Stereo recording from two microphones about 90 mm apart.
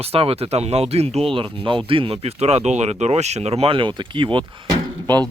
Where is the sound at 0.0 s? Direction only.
90° right.